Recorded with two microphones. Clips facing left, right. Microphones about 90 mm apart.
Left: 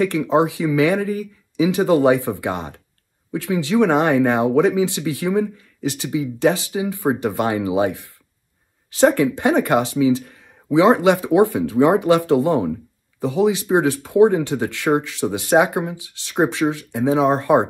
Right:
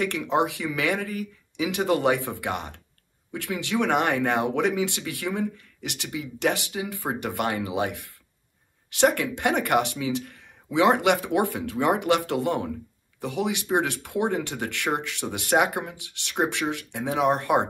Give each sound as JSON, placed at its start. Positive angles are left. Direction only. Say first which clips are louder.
{"t": 0.0, "sound": "speech", "louder": "left 7 dB", "side_deg": 20}